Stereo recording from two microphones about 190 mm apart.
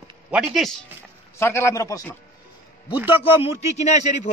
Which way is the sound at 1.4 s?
15° left (ahead or behind).